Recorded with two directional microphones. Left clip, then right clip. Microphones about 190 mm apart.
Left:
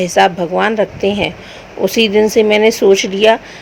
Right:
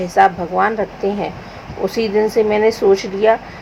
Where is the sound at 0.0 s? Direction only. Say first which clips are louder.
Left 2 dB; 50° left (ahead or behind).